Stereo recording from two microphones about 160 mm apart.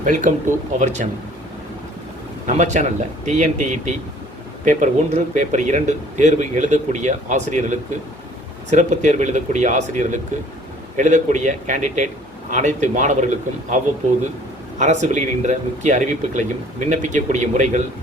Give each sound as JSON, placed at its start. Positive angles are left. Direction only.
{"t": 0.0, "sound": "speech", "side_deg": -55}
{"t": 2.5, "sound": "speech", "side_deg": -50}
{"t": 14.8, "sound": "speech", "side_deg": -50}